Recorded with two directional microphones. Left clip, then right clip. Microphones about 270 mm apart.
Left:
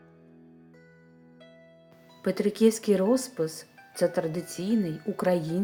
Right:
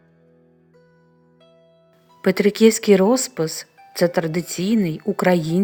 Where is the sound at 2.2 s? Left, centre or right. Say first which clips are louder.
Right 9 dB; right.